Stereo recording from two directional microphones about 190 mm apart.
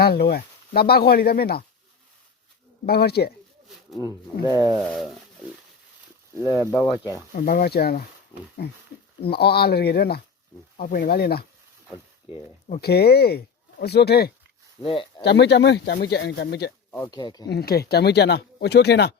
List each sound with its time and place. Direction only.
0.0 s speech: 55° left (ahead or behind)
2.8 s speech: 55° left (ahead or behind)
4.9 s a sound: centre (ahead or behind)
6.4 s speech: 10° right (ahead or behind)
6.8 s speech: 20° left (ahead or behind)
7.3 s speech: 50° left (ahead or behind)
9.2 s speech: 55° left (ahead or behind)
12.8 s speech: 55° left (ahead or behind)
14.8 s speech: 25° left (ahead or behind)
15.2 s speech: 65° left (ahead or behind)
16.9 s speech: 15° left (ahead or behind)
17.5 s speech: 55° left (ahead or behind)